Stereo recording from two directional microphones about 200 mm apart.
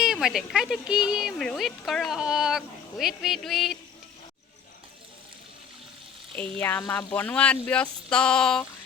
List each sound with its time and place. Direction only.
0.0 s speech: centre (ahead or behind)
6.3 s speech: 5° left (ahead or behind)